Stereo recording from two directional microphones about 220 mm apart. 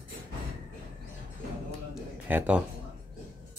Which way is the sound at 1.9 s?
5° right (ahead or behind).